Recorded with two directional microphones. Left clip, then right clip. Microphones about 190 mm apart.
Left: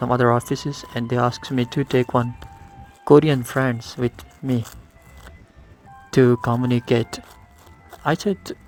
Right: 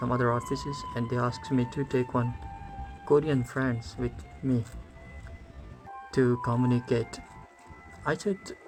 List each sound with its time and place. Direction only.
0.0 s speech: 45° left (ahead or behind)
6.1 s speech: 45° left (ahead or behind)